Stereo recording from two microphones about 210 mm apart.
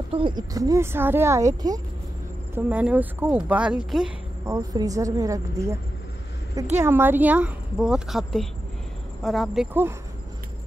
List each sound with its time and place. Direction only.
0.1 s a woman's voice: 20° right (ahead or behind); by 4.1 s 5° right (ahead or behind)
4.5 s a woman's voice: 15° right (ahead or behind)
6.8 s a woman's voice: 10° right (ahead or behind)